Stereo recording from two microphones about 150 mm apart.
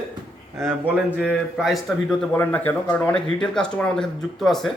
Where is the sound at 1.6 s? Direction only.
Centre (ahead or behind).